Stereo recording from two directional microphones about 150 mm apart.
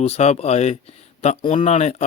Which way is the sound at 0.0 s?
45° left (ahead or behind).